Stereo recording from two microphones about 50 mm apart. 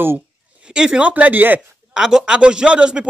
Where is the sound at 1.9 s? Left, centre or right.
Centre.